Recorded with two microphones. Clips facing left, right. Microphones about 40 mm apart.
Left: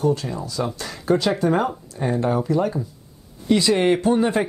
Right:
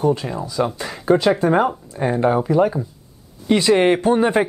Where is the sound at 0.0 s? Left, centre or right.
Centre.